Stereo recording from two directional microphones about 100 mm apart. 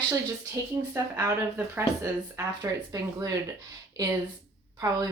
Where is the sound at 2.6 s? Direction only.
40° right (ahead or behind).